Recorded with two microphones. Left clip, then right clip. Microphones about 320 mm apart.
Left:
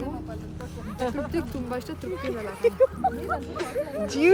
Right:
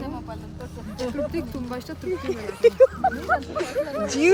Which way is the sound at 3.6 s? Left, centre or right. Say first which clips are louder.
Right 3 dB; centre.